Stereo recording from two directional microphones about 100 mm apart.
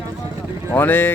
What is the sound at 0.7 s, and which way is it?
Speech, 20° left (ahead or behind).